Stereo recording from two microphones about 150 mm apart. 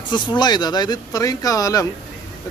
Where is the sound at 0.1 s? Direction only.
30° left (ahead or behind).